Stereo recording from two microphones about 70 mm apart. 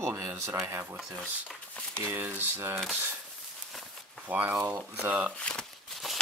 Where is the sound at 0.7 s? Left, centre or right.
Right.